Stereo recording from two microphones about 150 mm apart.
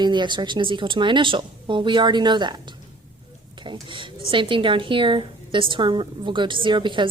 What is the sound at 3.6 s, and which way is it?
A woman's voice, 30° right (ahead or behind).